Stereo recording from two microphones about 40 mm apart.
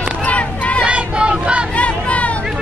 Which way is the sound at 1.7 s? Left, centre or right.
Left.